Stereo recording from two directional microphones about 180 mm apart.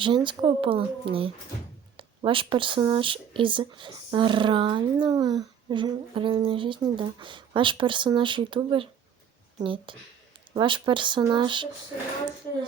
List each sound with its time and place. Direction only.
0.0 s speech: 25° right (ahead or behind)